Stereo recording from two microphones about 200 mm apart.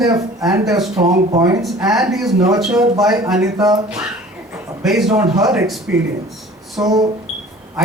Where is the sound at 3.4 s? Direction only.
20° right (ahead or behind).